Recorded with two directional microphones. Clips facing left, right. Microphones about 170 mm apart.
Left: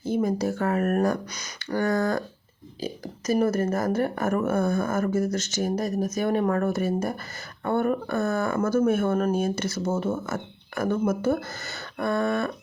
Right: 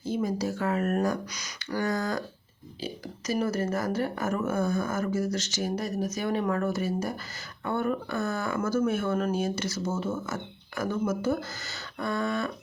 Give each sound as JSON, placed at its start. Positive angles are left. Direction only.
{"t": 0.0, "sound": "speech", "side_deg": 55}